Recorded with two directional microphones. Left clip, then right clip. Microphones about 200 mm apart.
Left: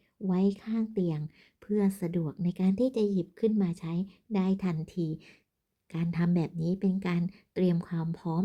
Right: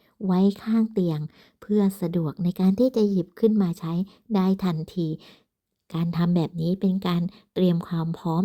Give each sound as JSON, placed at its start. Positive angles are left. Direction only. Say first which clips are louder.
{"t": 0.2, "sound": "a woman's voice", "louder": "right 6 dB", "side_deg": -35}